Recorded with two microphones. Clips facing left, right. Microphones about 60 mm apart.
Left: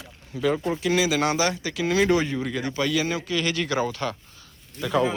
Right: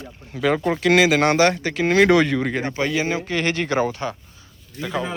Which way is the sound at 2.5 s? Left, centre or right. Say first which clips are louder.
Right 2 dB; right.